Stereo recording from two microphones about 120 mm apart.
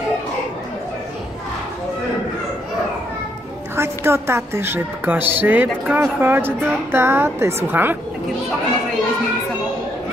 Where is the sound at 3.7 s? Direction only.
20° right (ahead or behind).